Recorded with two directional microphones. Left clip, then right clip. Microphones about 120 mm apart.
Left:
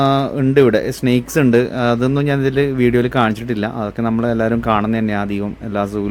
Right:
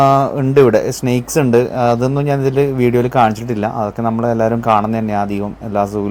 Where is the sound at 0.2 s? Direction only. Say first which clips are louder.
Right 2 dB; 25° left (ahead or behind).